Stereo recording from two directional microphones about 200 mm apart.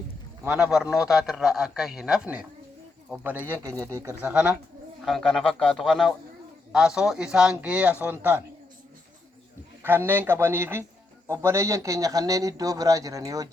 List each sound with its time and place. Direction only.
0.4 s a man's voice: 5° right (ahead or behind)
9.8 s speech: 10° right (ahead or behind)